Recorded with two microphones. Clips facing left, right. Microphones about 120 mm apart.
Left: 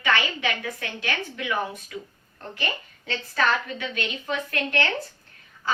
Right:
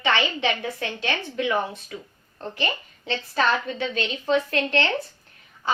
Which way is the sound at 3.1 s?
25° right (ahead or behind).